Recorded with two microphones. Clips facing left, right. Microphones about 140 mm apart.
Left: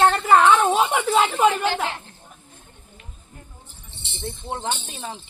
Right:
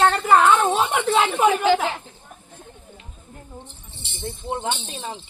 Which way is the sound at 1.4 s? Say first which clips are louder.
Right 2 dB; 10° right (ahead or behind).